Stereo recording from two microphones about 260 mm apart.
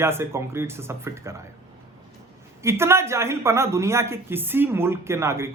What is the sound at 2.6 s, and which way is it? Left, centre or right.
A man's voice, centre.